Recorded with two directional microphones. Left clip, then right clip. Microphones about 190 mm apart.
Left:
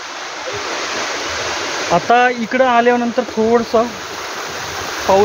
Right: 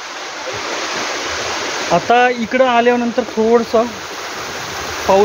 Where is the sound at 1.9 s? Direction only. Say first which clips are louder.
Even; 5° right (ahead or behind).